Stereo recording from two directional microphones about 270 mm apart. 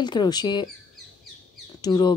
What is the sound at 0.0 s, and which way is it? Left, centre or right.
Speech, centre.